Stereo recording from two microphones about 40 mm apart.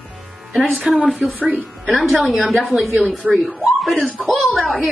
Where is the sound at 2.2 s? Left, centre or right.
Centre.